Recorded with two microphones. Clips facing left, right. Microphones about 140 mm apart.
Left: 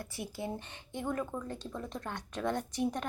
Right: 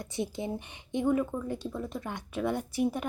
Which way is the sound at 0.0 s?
20° right (ahead or behind).